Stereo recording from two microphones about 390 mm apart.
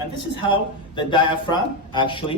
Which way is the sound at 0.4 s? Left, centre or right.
Centre.